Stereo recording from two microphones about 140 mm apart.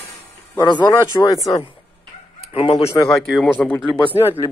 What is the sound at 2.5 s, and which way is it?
Speech, 45° left (ahead or behind).